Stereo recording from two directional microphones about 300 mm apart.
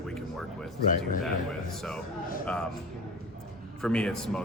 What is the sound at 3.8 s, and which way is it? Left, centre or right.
Speech, centre.